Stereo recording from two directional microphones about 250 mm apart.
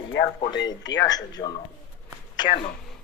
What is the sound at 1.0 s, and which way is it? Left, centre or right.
Speech, centre.